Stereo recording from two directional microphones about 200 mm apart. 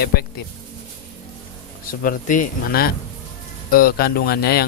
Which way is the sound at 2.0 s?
45° left (ahead or behind).